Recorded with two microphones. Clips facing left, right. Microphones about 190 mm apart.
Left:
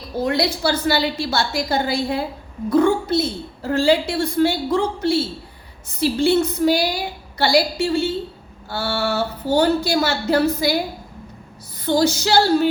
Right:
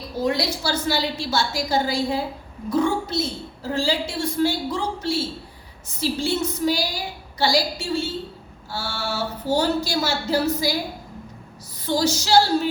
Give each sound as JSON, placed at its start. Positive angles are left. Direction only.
{"t": 0.3, "sound": "a woman's voice", "side_deg": 60}
{"t": 11.9, "sound": "a woman's voice", "side_deg": 60}